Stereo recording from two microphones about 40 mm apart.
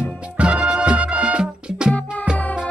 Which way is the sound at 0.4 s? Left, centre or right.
Right.